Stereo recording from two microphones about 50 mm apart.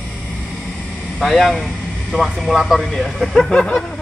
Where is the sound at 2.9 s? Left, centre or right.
Centre.